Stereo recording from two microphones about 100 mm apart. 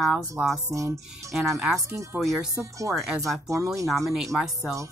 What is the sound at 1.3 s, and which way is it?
Speech, 5° right (ahead or behind).